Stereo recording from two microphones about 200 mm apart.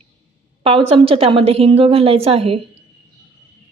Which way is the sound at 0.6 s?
30° right (ahead or behind).